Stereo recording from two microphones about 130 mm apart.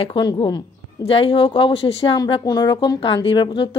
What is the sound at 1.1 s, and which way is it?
Speech, 45° left (ahead or behind).